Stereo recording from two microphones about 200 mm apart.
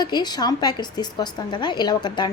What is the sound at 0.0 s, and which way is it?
A woman's voice, 20° left (ahead or behind).